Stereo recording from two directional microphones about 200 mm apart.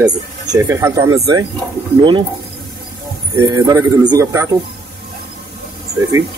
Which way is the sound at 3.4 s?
20° right (ahead or behind).